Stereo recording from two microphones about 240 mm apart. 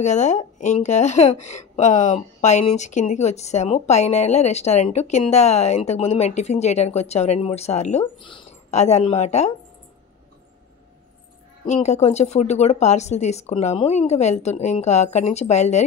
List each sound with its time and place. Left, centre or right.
0.0 s a woman's voice: left
11.6 s a woman's voice: left